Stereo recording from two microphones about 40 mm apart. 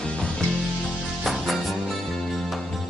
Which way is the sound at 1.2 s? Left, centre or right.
Centre.